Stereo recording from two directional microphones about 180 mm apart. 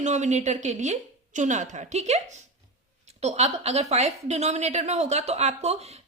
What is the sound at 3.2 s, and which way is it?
A woman's voice, 35° right (ahead or behind).